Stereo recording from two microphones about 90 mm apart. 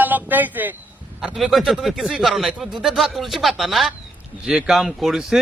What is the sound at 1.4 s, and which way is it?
Speech, centre (ahead or behind).